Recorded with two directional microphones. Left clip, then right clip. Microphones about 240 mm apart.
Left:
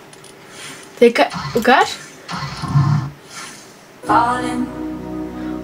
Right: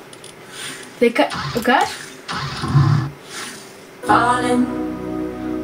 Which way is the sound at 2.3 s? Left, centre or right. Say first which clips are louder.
Right 1 dB; right.